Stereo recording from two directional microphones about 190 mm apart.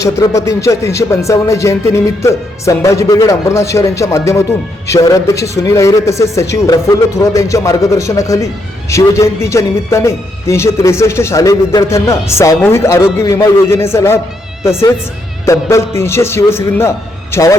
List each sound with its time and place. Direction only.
0.0 s speech: 15° left (ahead or behind)
15.4 s speech: 15° left (ahead or behind)